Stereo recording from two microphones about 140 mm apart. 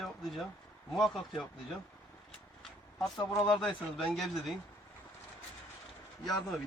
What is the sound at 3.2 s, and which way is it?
Speech, 25° left (ahead or behind).